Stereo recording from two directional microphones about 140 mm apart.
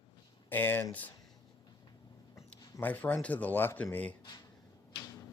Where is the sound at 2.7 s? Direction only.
10° left (ahead or behind).